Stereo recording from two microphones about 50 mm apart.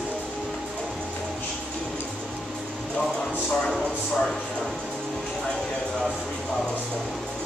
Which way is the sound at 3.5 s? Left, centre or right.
Centre.